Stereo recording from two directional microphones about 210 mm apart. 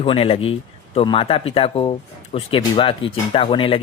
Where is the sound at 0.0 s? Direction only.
25° left (ahead or behind).